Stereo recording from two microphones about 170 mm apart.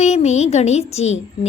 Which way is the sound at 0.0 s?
40° left (ahead or behind).